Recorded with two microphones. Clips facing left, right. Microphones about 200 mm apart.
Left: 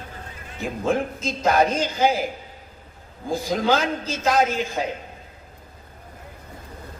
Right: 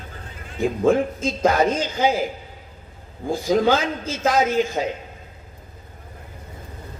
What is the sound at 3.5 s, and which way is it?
Speech, 50° right (ahead or behind).